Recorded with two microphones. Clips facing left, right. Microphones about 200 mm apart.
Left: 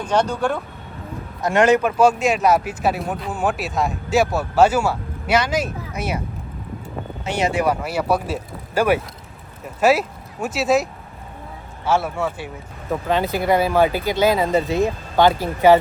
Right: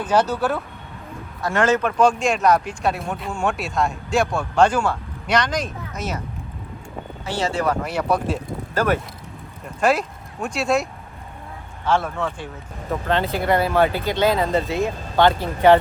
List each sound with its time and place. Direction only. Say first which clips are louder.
0.0 s speech: even; 5° right (ahead or behind)
1.4 s speech: left 4 dB; 20° left (ahead or behind)
7.3 s speech: left 2 dB; 20° left (ahead or behind); by 10.8 s centre (ahead or behind)
11.9 s speech: left 1 dB; 10° left (ahead or behind)
13.5 s speech: left 1 dB; 10° left (ahead or behind)